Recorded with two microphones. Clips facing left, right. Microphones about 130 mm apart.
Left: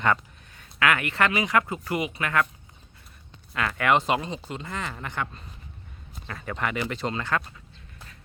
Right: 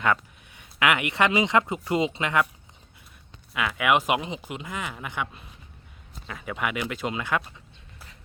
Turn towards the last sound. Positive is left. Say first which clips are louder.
# even
turn(degrees=-10)  # may be behind; listen again after turning